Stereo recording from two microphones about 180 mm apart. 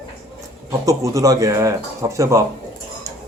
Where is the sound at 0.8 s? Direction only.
20° right (ahead or behind).